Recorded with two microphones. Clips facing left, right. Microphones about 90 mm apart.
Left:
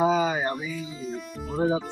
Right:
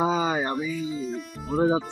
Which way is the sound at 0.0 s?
30° right (ahead or behind).